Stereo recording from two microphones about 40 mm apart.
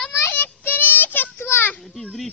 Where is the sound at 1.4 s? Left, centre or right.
Left.